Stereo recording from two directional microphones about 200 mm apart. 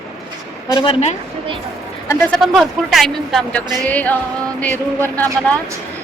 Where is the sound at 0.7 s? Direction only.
25° left (ahead or behind).